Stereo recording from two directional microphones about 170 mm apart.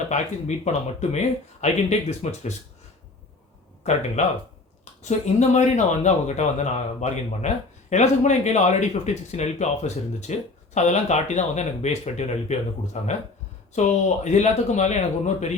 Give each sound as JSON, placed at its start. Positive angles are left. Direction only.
{"t": 0.1, "sound": "speech", "side_deg": 40}
{"t": 3.9, "sound": "speech", "side_deg": 40}
{"t": 5.0, "sound": "speech", "side_deg": 45}